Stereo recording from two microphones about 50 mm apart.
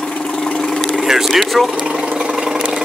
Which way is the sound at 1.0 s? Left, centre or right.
Centre.